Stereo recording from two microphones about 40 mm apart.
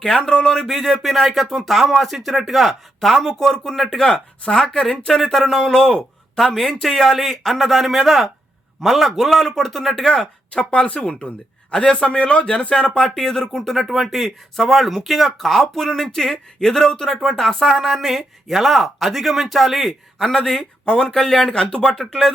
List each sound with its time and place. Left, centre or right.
0.1 s a man's voice: centre
0.9 s a man's voice: centre
4.9 s a man's voice: centre
9.9 s speech: centre; by 11.2 s left
11.7 s speech: centre
13.1 s a man's voice: centre
20.1 s a man's voice: centre
20.6 s a man's voice: centre